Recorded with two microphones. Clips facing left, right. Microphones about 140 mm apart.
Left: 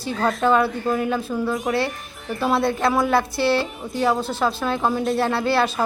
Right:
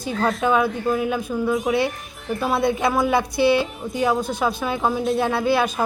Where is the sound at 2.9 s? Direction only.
Centre (ahead or behind).